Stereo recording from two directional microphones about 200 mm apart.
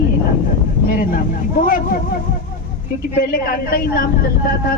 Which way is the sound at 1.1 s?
45° left (ahead or behind).